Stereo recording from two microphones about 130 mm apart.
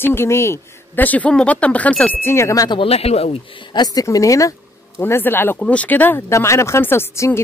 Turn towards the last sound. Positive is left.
turn(degrees=20)  # may be behind; listen again after turning